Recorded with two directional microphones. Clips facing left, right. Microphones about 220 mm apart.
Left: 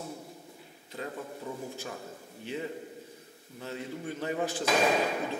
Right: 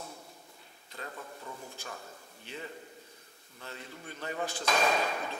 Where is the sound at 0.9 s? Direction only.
15° left (ahead or behind).